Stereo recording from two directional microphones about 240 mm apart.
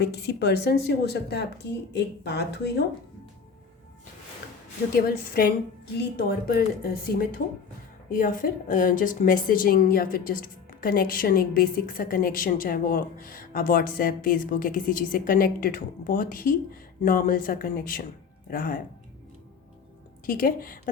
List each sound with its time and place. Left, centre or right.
0.0 s speech: left
4.9 s a woman's voice: left
20.2 s a woman's voice: left